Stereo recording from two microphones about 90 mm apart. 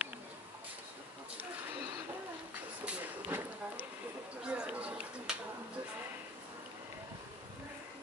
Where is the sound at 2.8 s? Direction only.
15° right (ahead or behind).